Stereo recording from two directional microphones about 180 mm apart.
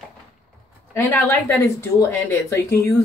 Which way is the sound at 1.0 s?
10° left (ahead or behind).